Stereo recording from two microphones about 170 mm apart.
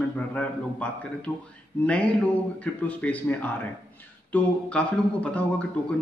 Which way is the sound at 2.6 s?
10° left (ahead or behind).